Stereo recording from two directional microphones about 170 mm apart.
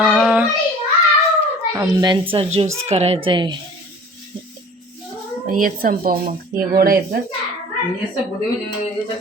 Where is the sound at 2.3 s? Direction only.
30° right (ahead or behind).